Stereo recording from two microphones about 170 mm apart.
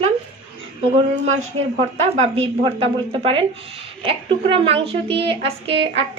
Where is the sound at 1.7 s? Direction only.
40° right (ahead or behind).